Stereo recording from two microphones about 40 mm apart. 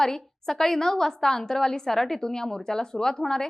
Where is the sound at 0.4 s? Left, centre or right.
Centre.